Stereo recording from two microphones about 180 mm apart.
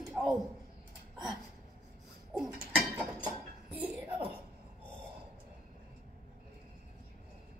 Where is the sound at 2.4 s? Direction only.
10° right (ahead or behind).